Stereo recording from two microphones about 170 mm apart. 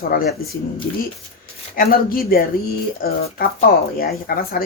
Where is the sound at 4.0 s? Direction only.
60° left (ahead or behind).